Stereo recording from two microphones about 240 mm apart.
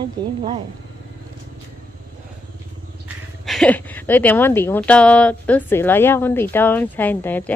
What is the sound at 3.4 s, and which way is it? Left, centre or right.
Speech, centre.